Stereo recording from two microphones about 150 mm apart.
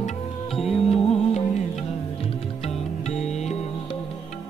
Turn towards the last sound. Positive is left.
turn(degrees=45)  # may be behind; listen again after turning